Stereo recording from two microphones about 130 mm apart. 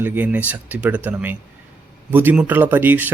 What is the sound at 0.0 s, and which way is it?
A man's voice, 15° right (ahead or behind).